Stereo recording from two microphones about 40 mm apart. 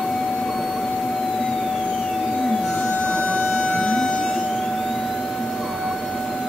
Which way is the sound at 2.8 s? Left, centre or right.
Left.